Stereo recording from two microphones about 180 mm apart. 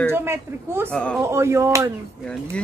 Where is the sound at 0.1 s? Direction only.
15° right (ahead or behind).